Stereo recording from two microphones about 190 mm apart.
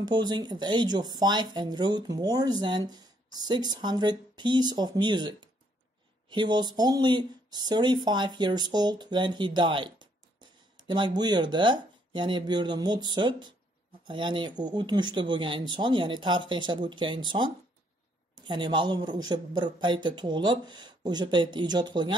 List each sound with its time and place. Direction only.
0.0 s speech: 20° right (ahead or behind)